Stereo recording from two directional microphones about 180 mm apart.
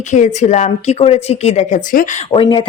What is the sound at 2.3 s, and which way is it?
Speech, 30° left (ahead or behind).